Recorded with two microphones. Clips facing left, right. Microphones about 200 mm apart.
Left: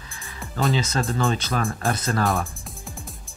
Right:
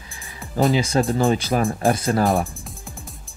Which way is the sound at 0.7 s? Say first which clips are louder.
Right 5 dB; 10° right (ahead or behind).